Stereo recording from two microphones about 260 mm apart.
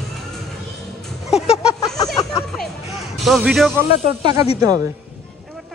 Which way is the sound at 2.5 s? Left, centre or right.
Centre.